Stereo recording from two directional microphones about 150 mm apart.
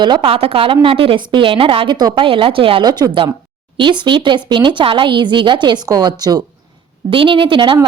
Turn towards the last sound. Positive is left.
turn(degrees=-35)  # may be behind; listen again after turning